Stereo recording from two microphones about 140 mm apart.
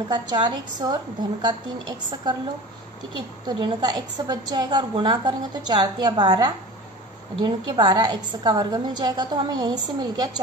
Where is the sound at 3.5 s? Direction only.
30° right (ahead or behind).